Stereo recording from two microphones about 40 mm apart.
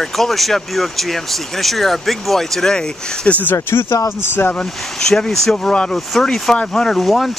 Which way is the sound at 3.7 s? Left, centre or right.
Left.